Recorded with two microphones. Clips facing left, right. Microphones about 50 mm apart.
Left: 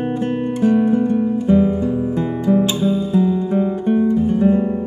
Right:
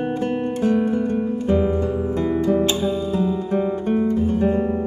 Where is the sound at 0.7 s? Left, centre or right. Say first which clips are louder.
Left 6 dB; centre.